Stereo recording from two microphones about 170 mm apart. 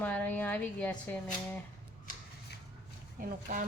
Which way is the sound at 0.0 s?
10° left (ahead or behind).